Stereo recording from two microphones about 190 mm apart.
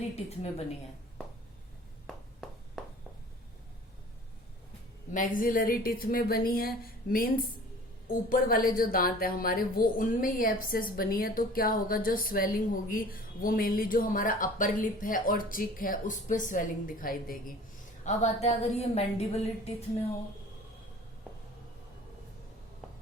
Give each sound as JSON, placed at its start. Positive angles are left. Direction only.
{"t": 2.0, "sound": "a sound", "side_deg": 0}
{"t": 5.1, "sound": "speech", "side_deg": 45}
{"t": 18.0, "sound": "a woman's voice", "side_deg": 35}